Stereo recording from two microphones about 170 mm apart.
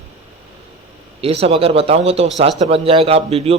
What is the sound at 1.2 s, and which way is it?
A man's voice, 35° right (ahead or behind).